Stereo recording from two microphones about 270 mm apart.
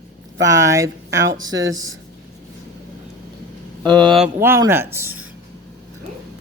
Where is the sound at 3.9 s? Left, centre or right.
Centre.